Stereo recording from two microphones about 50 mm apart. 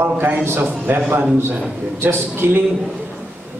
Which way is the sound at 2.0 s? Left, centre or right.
Right.